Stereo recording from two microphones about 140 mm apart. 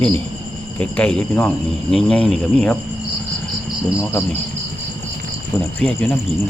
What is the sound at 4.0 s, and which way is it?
Speech, 20° left (ahead or behind).